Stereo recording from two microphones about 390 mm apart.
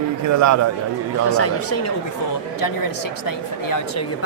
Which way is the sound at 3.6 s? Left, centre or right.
Left.